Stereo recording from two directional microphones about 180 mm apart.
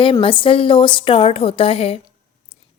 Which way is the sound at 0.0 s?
30° left (ahead or behind).